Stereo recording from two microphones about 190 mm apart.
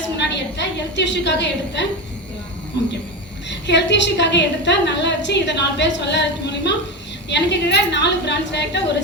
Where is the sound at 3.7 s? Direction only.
70° left (ahead or behind).